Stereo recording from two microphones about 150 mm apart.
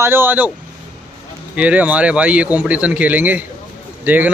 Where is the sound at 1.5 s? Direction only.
10° right (ahead or behind).